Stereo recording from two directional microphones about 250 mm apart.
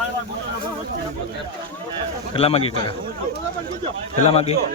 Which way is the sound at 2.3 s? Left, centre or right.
Left.